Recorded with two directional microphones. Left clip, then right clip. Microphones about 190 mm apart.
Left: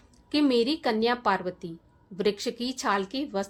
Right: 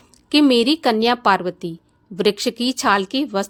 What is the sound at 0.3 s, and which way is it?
A woman's voice, 40° right (ahead or behind).